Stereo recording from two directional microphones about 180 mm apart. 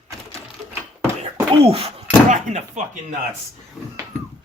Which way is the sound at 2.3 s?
40° right (ahead or behind).